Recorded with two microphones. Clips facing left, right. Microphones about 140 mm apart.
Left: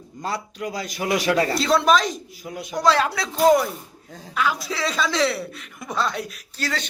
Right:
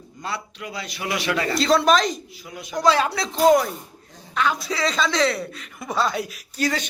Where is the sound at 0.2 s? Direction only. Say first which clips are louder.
Left 3 dB; 40° left (ahead or behind).